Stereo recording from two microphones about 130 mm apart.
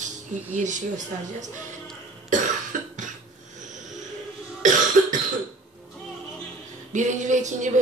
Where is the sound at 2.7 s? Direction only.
85° right.